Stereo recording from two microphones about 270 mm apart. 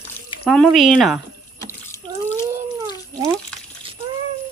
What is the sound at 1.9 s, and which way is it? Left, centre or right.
Water, centre.